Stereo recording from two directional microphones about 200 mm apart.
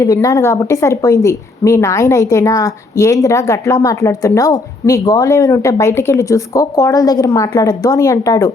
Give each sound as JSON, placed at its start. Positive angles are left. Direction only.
{"t": 0.0, "sound": "a woman's voice", "side_deg": 15}